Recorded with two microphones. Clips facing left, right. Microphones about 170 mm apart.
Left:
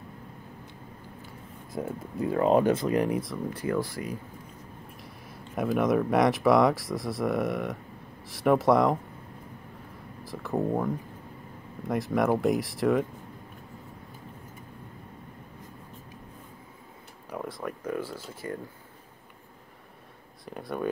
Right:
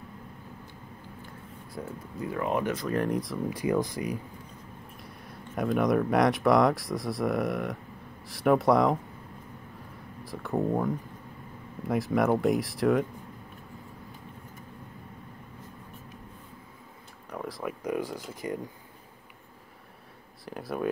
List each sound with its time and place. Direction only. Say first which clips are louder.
1.8 s speech: left 5 dB; 20° left (ahead or behind)
3.0 s speech: left 1 dB; 5° left (ahead or behind)
3.4 s speech: right 3 dB; 15° right (ahead or behind)
4.9 s speech: even; centre (ahead or behind)
10.2 s speech: even; centre (ahead or behind)
11.9 s speech: even; centre (ahead or behind)
17.3 s a sound: even; centre (ahead or behind)
17.8 s speech: right 3 dB; 15° right (ahead or behind)
20.4 s speech: even; centre (ahead or behind)